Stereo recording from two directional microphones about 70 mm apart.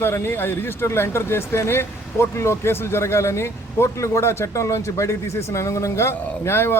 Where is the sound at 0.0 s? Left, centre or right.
Left.